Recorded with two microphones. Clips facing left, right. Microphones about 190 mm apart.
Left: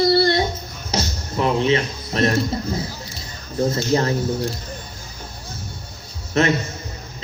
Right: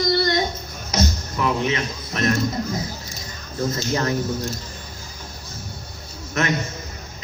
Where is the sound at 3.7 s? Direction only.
30° left (ahead or behind).